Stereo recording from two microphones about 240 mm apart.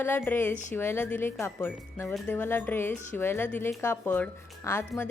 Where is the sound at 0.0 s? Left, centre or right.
Centre.